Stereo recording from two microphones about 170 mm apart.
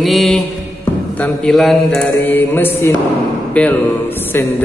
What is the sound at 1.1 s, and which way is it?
Speech, 5° left (ahead or behind).